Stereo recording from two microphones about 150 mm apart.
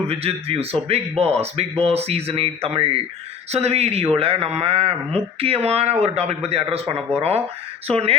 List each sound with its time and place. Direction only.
0.1 s a man's voice: 40° right (ahead or behind)